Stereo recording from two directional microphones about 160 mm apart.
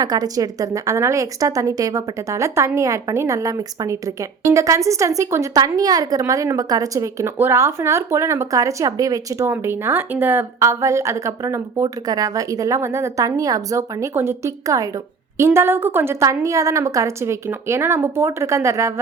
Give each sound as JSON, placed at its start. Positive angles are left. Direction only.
{"t": 0.0, "sound": "speech", "side_deg": -25}